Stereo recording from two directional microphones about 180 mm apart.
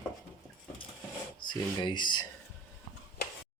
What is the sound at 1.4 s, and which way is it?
Speech, 25° left (ahead or behind).